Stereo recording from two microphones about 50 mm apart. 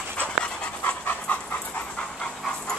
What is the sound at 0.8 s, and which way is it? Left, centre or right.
Pant, left.